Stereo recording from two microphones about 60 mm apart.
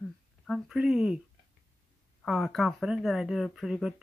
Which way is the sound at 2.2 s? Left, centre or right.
Centre.